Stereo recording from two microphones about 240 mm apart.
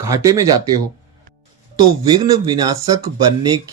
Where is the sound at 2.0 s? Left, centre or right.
Centre.